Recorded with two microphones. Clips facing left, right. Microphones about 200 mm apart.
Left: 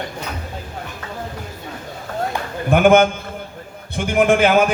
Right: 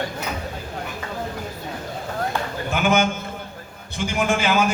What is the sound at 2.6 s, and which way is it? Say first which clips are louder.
Speech: left 8 dB; 55° left (ahead or behind).